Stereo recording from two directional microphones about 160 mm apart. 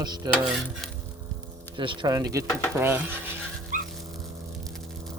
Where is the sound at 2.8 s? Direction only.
15° right (ahead or behind).